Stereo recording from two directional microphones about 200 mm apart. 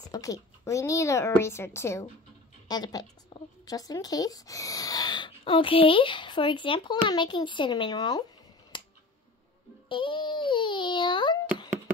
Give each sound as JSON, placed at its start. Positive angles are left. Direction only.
{"t": 0.1, "sound": "a child's voice", "side_deg": 15}
{"t": 8.7, "sound": "a sound", "side_deg": 20}
{"t": 9.8, "sound": "a child's voice", "side_deg": 25}